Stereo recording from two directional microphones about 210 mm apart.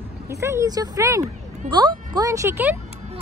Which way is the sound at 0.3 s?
15° right (ahead or behind).